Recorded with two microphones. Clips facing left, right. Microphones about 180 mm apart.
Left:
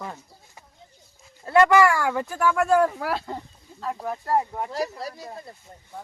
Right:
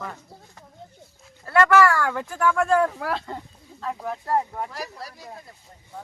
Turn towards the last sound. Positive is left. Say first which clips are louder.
# left 7 dB
turn(degrees=25)  # may be behind; listen again after turning